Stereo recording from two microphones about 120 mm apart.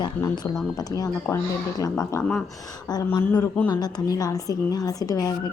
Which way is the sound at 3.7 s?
35° left (ahead or behind).